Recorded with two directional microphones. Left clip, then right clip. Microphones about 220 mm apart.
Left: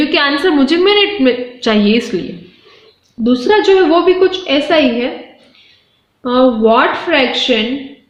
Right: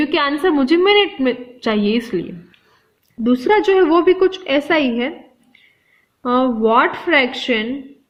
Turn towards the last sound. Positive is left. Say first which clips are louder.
# left 4 dB
turn(degrees=-40)  # may be behind; listen again after turning